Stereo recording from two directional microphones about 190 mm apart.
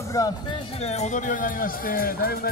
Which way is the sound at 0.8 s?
35° left (ahead or behind).